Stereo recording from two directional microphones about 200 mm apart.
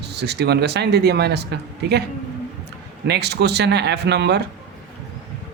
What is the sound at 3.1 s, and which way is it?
Speech, 55° right (ahead or behind).